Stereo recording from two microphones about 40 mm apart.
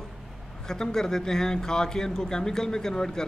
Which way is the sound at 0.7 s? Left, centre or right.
Centre.